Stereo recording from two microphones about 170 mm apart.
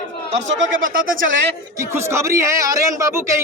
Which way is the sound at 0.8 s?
55° right (ahead or behind).